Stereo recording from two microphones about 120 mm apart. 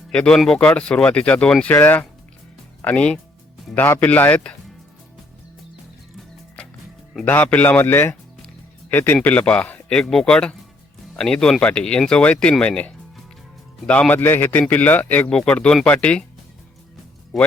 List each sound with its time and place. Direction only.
0.1 s speech: 5° left (ahead or behind)
7.3 s speech: 15° left (ahead or behind)